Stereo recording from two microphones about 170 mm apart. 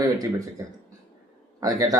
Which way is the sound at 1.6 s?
20° right (ahead or behind).